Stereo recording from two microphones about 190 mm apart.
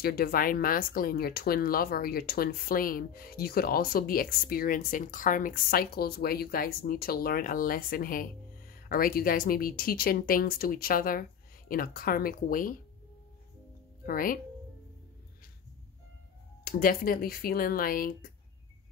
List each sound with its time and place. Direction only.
0.0 s speech: 55° left (ahead or behind)
14.0 s speech: 50° left (ahead or behind)
16.6 s speech: 50° left (ahead or behind)